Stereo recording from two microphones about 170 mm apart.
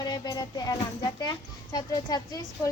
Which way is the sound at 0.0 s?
25° left (ahead or behind).